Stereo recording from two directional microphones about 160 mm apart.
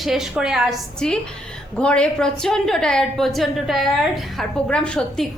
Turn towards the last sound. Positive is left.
turn(degrees=5)  # may be behind; listen again after turning